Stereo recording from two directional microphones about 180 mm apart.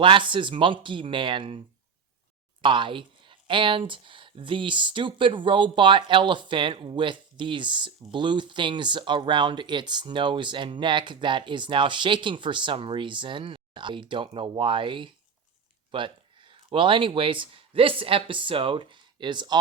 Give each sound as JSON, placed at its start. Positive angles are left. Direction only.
{"t": 0.0, "sound": "speech", "side_deg": -25}